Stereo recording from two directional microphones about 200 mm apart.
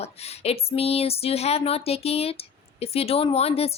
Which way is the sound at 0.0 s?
30° left (ahead or behind).